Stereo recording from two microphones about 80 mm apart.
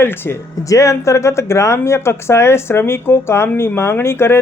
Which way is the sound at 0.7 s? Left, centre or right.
Left.